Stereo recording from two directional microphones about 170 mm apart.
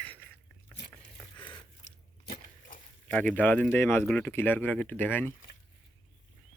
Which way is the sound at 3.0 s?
5° left (ahead or behind).